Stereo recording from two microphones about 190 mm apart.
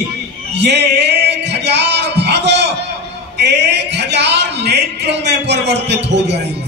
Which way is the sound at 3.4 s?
65° right (ahead or behind).